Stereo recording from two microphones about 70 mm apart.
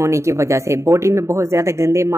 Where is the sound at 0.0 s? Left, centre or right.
Right.